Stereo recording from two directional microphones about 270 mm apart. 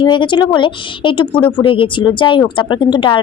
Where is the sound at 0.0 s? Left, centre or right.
Centre.